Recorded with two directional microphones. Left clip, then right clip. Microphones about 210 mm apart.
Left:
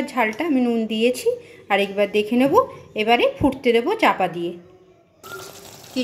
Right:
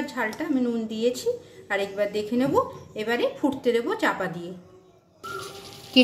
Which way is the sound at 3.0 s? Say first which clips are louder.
Left 7 dB; 20° left (ahead or behind).